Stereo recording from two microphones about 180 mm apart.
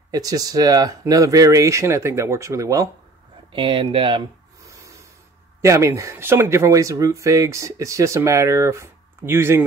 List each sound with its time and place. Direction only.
0.1 s speech: 20° right (ahead or behind)
3.5 s speech: 25° right (ahead or behind)
4.6 s snort: 15° right (ahead or behind)
5.6 s speech: 15° right (ahead or behind)